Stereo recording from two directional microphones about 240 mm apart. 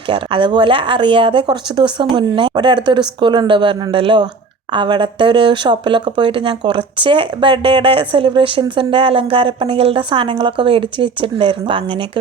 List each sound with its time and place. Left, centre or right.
0.1 s speech: right